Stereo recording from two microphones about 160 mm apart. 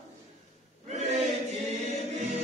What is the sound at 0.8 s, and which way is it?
Choir, 45° right (ahead or behind).